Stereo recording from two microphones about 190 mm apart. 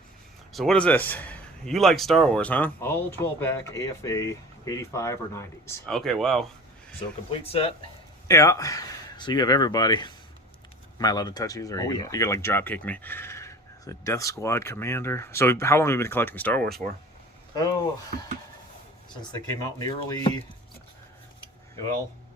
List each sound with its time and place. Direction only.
0.5 s speech: centre (ahead or behind)
5.8 s speech: centre (ahead or behind)
7.3 s speech: 30° left (ahead or behind)
8.3 s speech: 15° left (ahead or behind)
17.5 s speech: 20° left (ahead or behind)
19.8 s speech: 20° left (ahead or behind)